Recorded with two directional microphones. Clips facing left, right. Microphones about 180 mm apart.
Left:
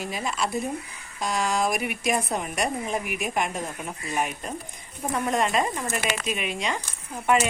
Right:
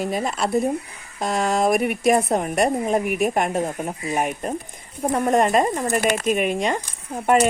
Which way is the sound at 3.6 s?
35° right (ahead or behind).